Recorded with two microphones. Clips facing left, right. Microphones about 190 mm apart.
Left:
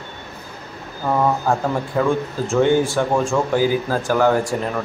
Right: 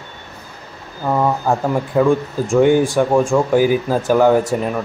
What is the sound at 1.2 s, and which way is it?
Speech, 10° right (ahead or behind).